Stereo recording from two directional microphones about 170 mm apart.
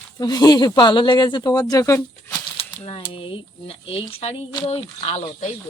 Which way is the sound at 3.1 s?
30° left (ahead or behind).